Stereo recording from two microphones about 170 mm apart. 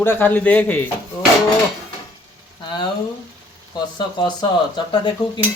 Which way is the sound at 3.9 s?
25° left (ahead or behind).